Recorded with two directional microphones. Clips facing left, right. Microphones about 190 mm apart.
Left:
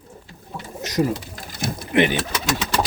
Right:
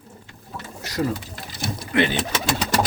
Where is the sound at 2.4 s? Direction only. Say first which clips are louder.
Right 1 dB; 40° right (ahead or behind).